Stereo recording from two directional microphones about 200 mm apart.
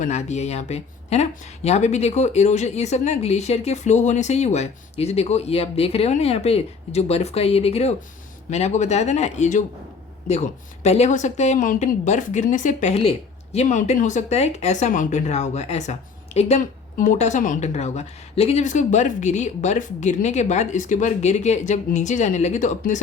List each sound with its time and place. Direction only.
0.0 s speech: 35° left (ahead or behind)